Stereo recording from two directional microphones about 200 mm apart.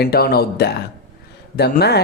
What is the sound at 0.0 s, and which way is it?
Speech, 50° left (ahead or behind).